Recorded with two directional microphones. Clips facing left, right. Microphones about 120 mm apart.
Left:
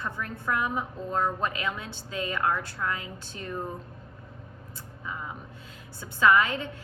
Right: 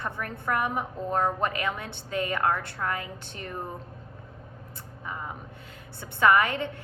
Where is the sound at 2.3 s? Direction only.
25° right (ahead or behind).